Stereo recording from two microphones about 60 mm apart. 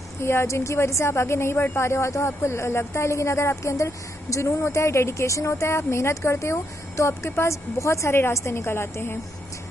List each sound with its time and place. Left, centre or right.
0.2 s a woman's voice: left